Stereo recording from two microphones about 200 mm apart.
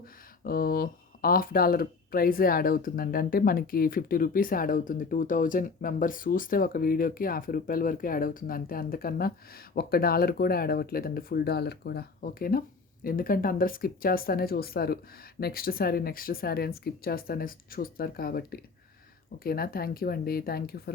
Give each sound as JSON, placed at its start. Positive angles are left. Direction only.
{"t": 0.4, "sound": "speech", "side_deg": 45}